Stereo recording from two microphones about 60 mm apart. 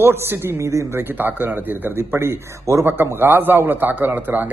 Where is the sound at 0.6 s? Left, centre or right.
Right.